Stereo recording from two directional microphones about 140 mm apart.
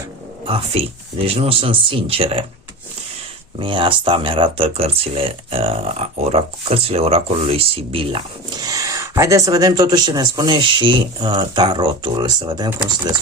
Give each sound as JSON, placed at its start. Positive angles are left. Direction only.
{"t": 0.4, "sound": "speech", "side_deg": -40}
{"t": 3.6, "sound": "speech", "side_deg": -35}
{"t": 8.5, "sound": "speech", "side_deg": -25}